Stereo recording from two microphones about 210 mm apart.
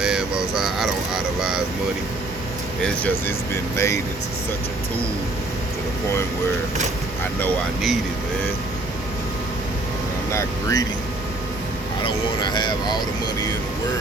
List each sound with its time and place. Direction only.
0.0 s vehicle: 5° right (ahead or behind)
2.8 s speech: 5° left (ahead or behind)
7.3 s speech: 5° left (ahead or behind)
10.3 s speech: 15° left (ahead or behind)
12.0 s speech: 20° left (ahead or behind)